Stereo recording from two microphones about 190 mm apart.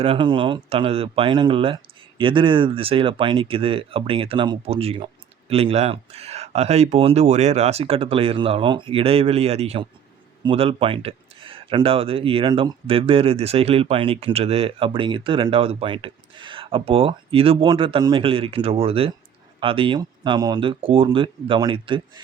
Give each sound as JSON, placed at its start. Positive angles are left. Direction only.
{"t": 0.0, "sound": "speech", "side_deg": -30}